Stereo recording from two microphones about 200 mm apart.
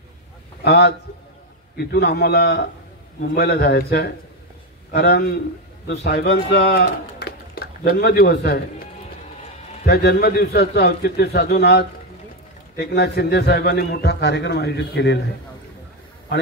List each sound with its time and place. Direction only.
0.7 s a man's voice: 55° left (ahead or behind)
9.8 s a man's voice: 55° left (ahead or behind)